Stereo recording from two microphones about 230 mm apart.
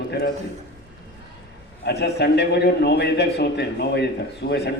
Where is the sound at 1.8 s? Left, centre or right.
Left.